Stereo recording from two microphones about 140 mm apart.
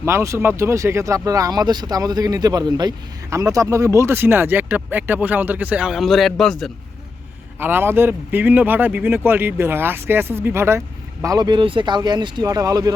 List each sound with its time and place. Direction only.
0.0 s speech: 20° right (ahead or behind); by 6.7 s centre (ahead or behind)
7.6 s speech: 15° right (ahead or behind)